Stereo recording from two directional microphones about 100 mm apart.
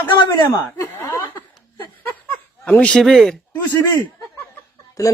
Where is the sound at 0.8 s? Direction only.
30° left (ahead or behind).